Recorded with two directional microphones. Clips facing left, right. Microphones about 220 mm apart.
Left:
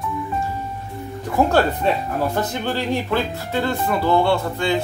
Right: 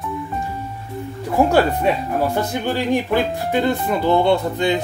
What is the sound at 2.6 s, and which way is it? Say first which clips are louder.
Speech: right 3 dB; 15° right (ahead or behind).